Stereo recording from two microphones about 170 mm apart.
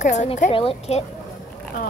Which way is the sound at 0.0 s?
45° left (ahead or behind).